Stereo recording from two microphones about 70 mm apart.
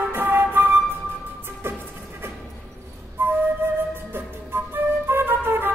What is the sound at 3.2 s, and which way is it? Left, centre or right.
Flute, right.